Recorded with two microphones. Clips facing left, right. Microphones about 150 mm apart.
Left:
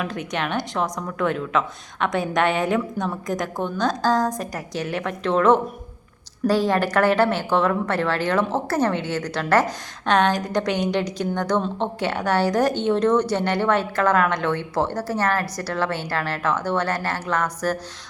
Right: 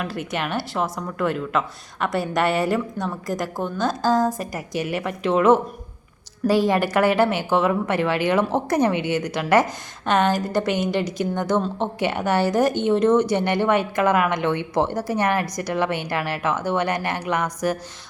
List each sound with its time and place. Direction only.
0.0 s a woman's voice: 5° right (ahead or behind)